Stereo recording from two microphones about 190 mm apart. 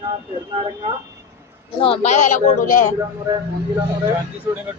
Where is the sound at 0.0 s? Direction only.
30° right (ahead or behind).